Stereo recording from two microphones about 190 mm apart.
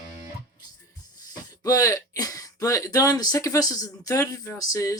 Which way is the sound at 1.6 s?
20° left (ahead or behind).